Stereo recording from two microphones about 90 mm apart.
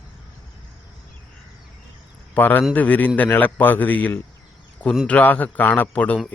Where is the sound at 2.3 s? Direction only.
20° left (ahead or behind).